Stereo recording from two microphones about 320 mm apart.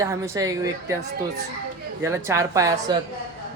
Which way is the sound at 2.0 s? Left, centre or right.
Centre.